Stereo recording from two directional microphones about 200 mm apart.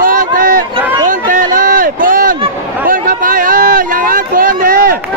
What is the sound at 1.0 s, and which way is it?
Run, 40° right (ahead or behind).